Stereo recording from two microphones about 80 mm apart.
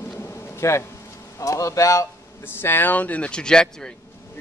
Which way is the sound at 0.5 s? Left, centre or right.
Left.